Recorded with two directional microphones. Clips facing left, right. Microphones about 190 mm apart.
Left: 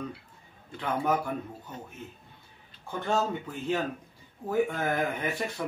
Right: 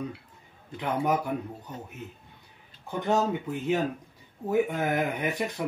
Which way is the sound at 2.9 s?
15° right (ahead or behind).